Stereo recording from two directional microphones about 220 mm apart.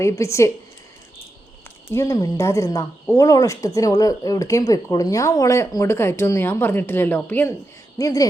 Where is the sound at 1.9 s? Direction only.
15° left (ahead or behind).